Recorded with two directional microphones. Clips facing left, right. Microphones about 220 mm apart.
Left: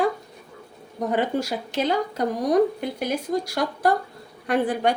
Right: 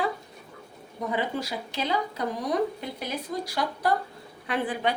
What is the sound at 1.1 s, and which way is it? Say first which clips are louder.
A woman's voice: left 6 dB; 45° left (ahead or behind).